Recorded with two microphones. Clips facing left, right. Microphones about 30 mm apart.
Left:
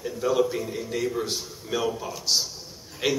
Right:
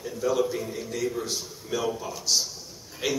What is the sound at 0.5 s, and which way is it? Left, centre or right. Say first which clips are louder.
Speech: left 2 dB; centre.